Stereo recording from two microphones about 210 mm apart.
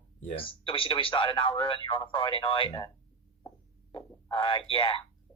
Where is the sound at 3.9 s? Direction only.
25° left (ahead or behind).